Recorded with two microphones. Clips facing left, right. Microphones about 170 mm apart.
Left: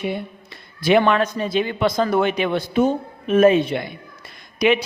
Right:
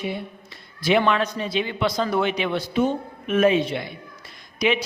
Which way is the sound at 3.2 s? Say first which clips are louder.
Left 4 dB; 40° left (ahead or behind).